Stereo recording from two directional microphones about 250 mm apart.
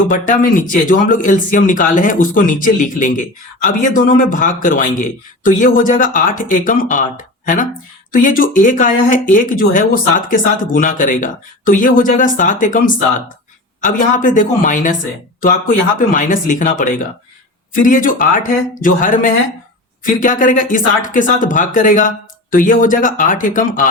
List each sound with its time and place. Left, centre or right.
0.1 s speech: left